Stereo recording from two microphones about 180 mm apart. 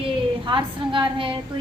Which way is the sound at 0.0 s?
25° right (ahead or behind).